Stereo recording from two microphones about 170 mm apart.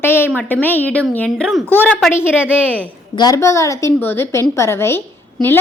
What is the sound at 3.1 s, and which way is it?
A woman's voice, 20° left (ahead or behind).